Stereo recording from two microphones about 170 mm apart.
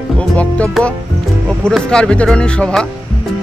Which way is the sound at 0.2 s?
5° left (ahead or behind).